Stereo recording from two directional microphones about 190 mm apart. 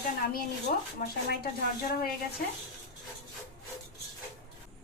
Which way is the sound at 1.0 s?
55° left (ahead or behind).